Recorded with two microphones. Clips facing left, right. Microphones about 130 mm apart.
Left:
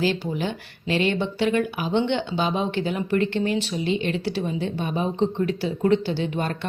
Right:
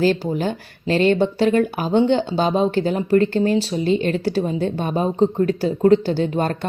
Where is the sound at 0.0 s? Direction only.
45° right (ahead or behind).